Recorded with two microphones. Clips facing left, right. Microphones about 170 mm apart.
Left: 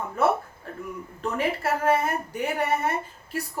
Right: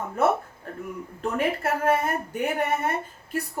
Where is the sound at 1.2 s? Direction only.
50° right (ahead or behind).